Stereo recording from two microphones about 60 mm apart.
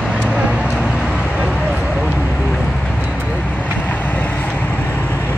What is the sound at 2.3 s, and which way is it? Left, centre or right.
Vehicle, centre.